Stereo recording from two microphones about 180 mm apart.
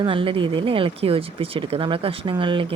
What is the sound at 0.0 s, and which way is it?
Speech, 30° right (ahead or behind).